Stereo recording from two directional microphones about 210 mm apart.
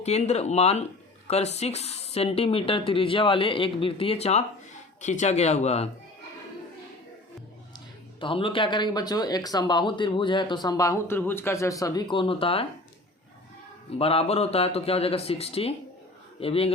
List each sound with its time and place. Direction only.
0.0 s speech: 30° left (ahead or behind)
8.2 s speech: 25° left (ahead or behind)
14.0 s speech: 30° left (ahead or behind)